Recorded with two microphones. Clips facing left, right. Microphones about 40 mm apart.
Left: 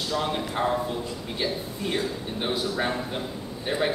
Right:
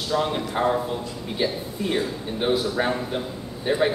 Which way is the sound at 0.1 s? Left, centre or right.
Centre.